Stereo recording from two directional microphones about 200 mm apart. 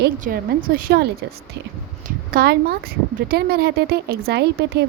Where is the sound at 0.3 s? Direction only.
45° right (ahead or behind).